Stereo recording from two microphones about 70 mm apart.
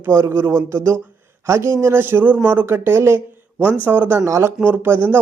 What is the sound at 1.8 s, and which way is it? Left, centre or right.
Speech, right.